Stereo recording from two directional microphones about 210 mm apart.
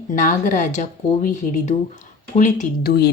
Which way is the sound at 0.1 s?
40° left (ahead or behind).